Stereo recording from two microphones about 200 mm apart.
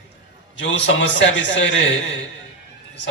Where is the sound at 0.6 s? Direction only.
65° left (ahead or behind).